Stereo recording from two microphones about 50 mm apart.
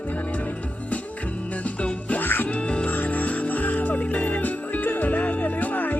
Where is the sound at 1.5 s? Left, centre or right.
Left.